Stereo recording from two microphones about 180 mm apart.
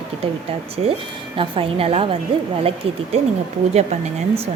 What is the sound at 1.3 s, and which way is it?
Speech, 30° right (ahead or behind).